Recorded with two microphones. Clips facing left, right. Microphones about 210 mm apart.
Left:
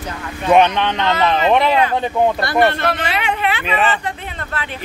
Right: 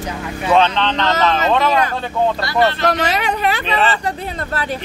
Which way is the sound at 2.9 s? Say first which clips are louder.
Right 2 dB; 40° right (ahead or behind).